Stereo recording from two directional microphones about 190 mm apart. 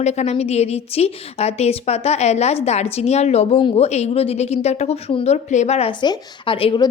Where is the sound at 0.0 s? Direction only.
35° left (ahead or behind).